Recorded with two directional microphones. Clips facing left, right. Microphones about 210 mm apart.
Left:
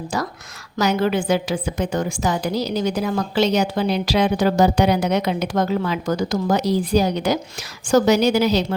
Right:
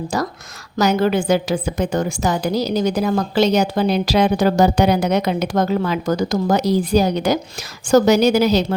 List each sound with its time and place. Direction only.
0.1 s a woman's voice: 40° right (ahead or behind)